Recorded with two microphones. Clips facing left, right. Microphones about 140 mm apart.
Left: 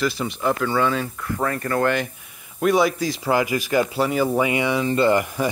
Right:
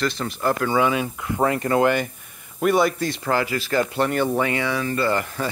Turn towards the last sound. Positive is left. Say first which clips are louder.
# left 4 dB
turn(degrees=15)  # may be behind; listen again after turning